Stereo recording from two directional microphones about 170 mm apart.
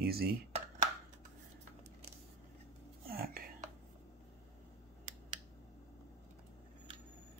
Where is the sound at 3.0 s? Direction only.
60° right (ahead or behind).